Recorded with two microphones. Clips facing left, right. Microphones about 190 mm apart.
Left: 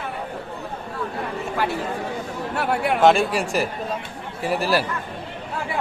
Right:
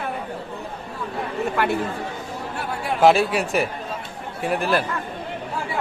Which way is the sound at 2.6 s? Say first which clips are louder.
Left 6 dB; 65° left (ahead or behind).